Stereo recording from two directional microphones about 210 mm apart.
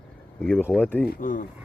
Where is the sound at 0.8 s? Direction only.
10° left (ahead or behind).